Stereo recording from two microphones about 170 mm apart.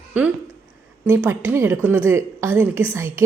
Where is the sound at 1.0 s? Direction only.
10° right (ahead or behind).